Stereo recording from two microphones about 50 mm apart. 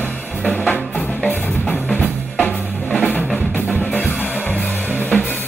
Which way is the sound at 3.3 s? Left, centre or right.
Left.